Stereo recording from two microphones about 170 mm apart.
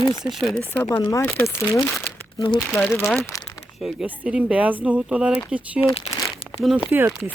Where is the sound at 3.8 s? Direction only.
5° right (ahead or behind).